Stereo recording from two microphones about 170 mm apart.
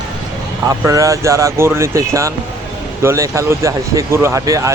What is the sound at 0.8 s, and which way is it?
Speech, 20° right (ahead or behind).